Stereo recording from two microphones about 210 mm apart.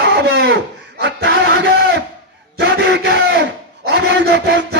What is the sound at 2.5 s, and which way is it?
A man's voice, 55° right (ahead or behind).